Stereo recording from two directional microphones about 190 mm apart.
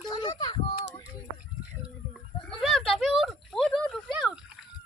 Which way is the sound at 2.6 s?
Centre (ahead or behind).